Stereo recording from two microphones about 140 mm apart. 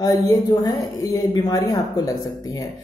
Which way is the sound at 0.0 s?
25° left (ahead or behind).